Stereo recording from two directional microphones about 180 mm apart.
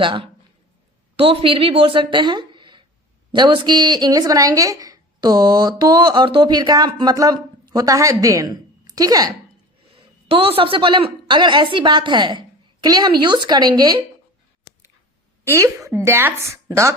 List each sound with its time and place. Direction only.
0.0 s a woman's voice: 30° right (ahead or behind)
15.4 s a woman's voice: 15° right (ahead or behind)